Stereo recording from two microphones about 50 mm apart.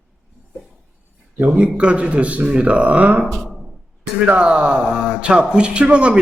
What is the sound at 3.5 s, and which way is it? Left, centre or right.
Music, centre.